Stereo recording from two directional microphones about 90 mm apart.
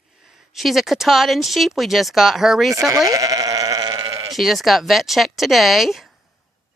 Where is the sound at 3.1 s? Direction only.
40° right (ahead or behind).